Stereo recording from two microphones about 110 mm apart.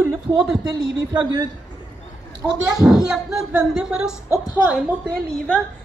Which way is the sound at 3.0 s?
5° right (ahead or behind).